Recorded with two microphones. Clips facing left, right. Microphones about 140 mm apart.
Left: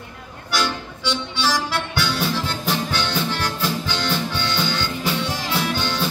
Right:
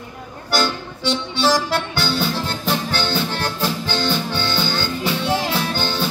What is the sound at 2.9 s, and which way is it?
Music, 30° right (ahead or behind).